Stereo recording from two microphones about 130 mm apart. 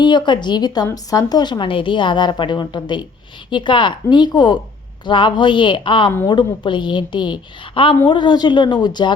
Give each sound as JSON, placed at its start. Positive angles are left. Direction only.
{"t": 0.0, "sound": "a woman's voice", "side_deg": 35}